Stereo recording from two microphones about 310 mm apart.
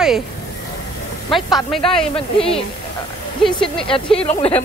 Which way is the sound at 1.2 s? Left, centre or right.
Centre.